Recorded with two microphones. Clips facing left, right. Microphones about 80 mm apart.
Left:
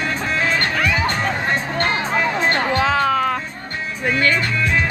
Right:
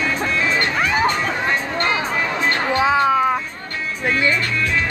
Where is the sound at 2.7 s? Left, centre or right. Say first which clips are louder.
Right 4 dB; centre.